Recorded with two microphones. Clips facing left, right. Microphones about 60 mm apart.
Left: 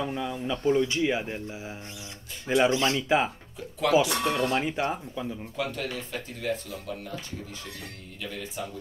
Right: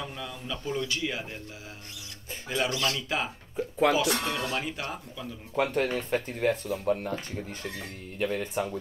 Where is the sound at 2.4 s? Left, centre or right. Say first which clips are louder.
Left 6 dB; left.